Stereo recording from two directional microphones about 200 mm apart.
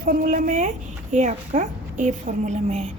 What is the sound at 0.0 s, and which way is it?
A woman's voice, 45° right (ahead or behind).